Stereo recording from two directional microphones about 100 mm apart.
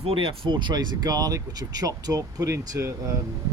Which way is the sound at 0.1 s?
60° right (ahead or behind).